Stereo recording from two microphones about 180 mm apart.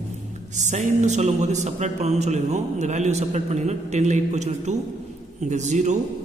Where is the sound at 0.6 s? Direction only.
40° right (ahead or behind).